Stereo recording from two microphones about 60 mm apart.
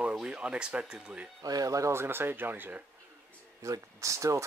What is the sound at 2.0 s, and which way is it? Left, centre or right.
Speech, right.